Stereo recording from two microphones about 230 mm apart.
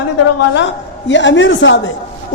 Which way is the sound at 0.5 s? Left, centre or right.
Left.